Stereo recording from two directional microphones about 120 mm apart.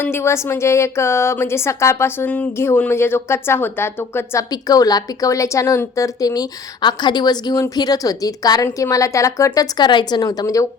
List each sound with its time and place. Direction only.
0.0 s a woman's voice: 20° left (ahead or behind)